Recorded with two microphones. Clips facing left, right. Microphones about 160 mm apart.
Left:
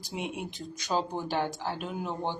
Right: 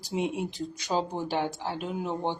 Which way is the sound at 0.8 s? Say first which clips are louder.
Right 1 dB; 10° right (ahead or behind).